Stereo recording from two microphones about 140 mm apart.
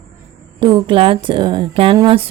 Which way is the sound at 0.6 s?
35° right (ahead or behind).